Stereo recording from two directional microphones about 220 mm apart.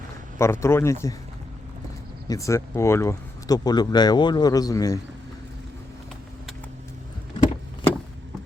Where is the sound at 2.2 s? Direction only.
15° left (ahead or behind).